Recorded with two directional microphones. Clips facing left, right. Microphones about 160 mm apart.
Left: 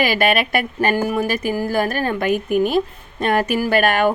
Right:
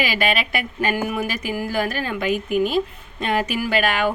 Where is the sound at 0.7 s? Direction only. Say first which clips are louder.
Left 3 dB; 35° left (ahead or behind).